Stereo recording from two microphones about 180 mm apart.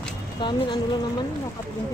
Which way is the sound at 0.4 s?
25° left (ahead or behind).